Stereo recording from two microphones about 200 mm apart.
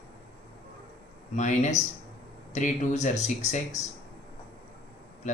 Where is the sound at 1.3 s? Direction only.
35° left (ahead or behind).